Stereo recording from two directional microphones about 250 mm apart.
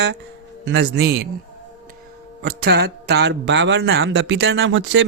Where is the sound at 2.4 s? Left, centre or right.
Right.